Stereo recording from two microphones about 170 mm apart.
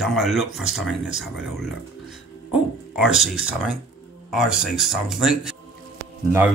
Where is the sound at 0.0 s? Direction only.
Centre (ahead or behind).